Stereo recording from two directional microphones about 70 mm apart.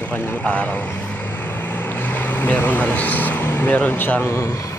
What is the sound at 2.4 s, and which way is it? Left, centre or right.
Speech, left.